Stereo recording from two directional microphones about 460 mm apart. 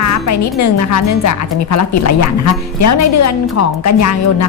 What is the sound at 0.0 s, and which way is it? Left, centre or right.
Speech, left.